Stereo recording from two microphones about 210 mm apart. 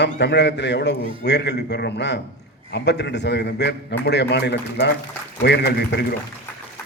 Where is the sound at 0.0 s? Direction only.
55° left (ahead or behind).